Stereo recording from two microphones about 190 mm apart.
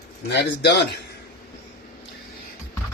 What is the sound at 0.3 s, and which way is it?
Speech, 60° left (ahead or behind).